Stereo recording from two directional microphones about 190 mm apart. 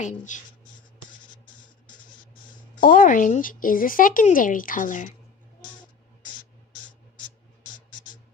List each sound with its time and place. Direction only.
0.0 s speech: 40° left (ahead or behind)
2.7 s speech: 45° left (ahead or behind)